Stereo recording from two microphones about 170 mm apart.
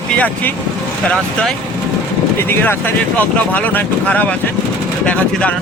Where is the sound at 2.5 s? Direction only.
15° left (ahead or behind).